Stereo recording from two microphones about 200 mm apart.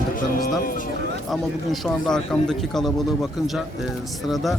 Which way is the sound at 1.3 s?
Centre (ahead or behind).